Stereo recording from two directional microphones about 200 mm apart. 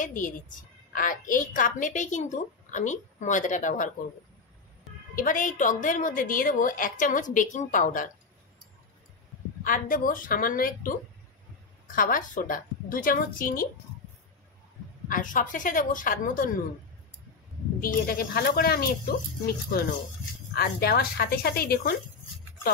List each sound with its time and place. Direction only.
0.0 s a woman's voice: 40° left (ahead or behind)
5.1 s a woman's voice: 45° left (ahead or behind)
9.6 s a woman's voice: 45° left (ahead or behind)
15.0 s a woman's voice: 40° left (ahead or behind)
17.7 s a woman's voice: 45° left (ahead or behind)
20.5 s a woman's voice: 50° left (ahead or behind)